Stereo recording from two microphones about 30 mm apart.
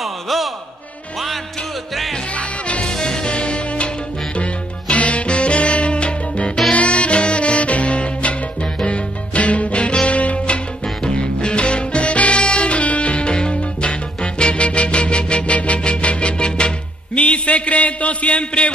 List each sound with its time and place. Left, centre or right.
0.0 s a sound: centre
2.8 s music: left
3.3 s music: left
6.7 s music: left
17.2 s a man's voice: left